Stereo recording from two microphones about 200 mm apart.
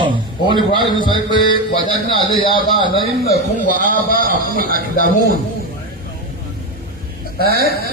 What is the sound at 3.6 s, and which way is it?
Speech, 40° left (ahead or behind).